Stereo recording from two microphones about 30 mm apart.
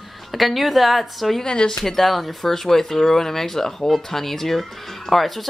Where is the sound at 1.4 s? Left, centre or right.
Left.